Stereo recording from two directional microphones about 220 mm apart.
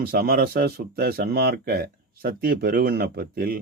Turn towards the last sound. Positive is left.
turn(degrees=-45)  # may be behind; listen again after turning